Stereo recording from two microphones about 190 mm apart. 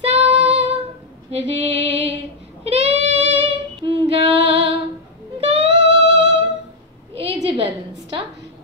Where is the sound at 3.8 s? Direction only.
30° right (ahead or behind).